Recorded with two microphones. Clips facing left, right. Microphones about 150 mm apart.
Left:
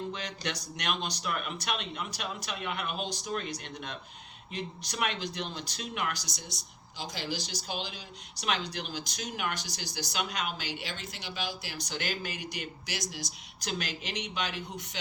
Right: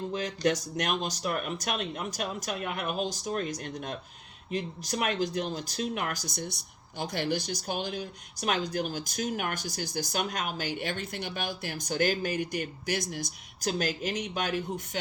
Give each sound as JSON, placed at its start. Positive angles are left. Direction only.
{"t": 0.1, "sound": "speech", "side_deg": -40}
{"t": 13.7, "sound": "speech", "side_deg": -40}